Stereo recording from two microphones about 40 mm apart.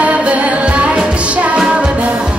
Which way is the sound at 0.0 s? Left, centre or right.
Right.